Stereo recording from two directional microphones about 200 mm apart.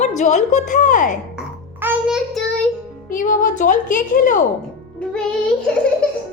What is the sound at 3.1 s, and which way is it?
A woman's voice, 40° left (ahead or behind).